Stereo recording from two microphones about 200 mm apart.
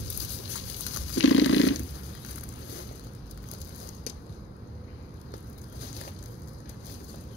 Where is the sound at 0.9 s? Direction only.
75° left (ahead or behind).